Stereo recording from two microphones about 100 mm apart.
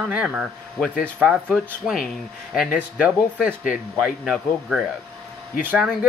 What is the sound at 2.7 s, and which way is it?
Speech, 15° right (ahead or behind).